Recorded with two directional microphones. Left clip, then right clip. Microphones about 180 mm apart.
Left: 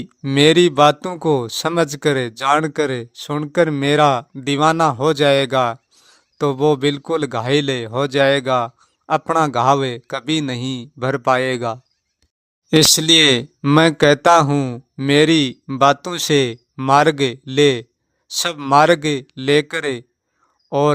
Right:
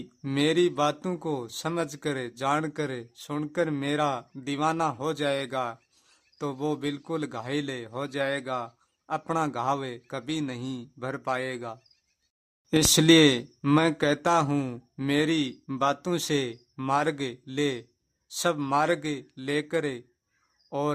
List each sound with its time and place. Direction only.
0.0 s speech: 30° left (ahead or behind)
12.9 s speech: 5° left (ahead or behind)
13.1 s speech: 35° left (ahead or behind)